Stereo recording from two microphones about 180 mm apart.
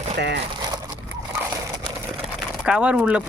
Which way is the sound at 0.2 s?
75° right (ahead or behind).